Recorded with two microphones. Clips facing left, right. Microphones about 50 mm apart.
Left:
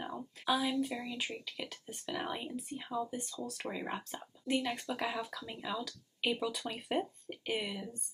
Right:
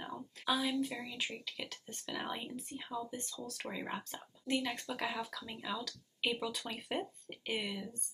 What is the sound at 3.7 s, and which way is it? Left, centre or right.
Speech, centre.